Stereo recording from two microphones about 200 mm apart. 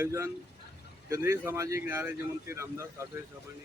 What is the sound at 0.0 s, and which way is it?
Speech, 15° right (ahead or behind).